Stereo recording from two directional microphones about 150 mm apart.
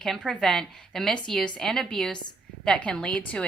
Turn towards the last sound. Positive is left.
turn(degrees=10)  # may be behind; listen again after turning